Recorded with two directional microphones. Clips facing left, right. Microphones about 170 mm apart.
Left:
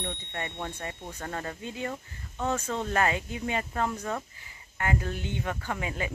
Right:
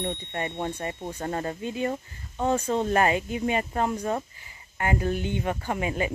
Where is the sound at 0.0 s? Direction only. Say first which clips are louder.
Right 6 dB; 30° right (ahead or behind).